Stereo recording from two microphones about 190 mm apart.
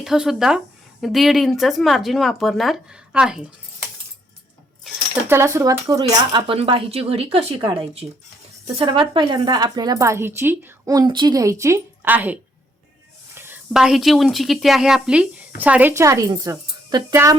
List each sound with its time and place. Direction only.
0.0 s speech: centre (ahead or behind)
5.3 s speech: 15° right (ahead or behind)